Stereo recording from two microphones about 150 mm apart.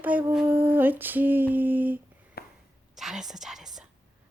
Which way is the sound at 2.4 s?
90° left.